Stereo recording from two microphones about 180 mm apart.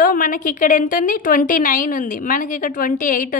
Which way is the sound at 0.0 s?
50° left (ahead or behind).